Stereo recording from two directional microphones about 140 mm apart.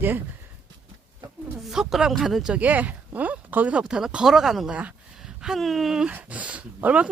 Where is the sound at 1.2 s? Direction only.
30° right (ahead or behind).